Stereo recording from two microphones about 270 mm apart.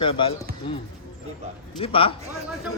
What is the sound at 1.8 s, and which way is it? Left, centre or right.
Speech, centre.